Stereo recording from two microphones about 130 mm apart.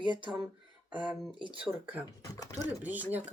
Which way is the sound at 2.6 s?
10° right (ahead or behind).